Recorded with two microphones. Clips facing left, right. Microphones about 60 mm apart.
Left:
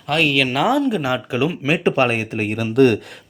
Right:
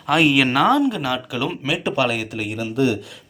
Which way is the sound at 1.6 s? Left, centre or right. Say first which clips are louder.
Left 3 dB; left.